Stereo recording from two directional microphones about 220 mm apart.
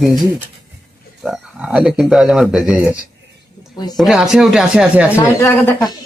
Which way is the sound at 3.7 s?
20° left (ahead or behind).